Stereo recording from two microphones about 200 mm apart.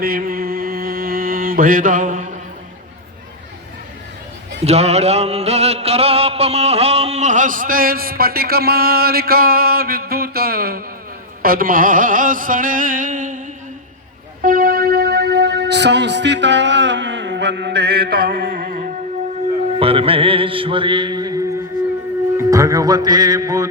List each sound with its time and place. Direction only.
0.0 s mantra: 50° right (ahead or behind)
4.6 s a sound: 30° right (ahead or behind); by 10.8 s 50° right (ahead or behind)
11.4 s music: 45° right (ahead or behind)
14.4 s music: 45° right (ahead or behind)
19.8 s mantra: 30° right (ahead or behind)
22.4 s music: 15° right (ahead or behind)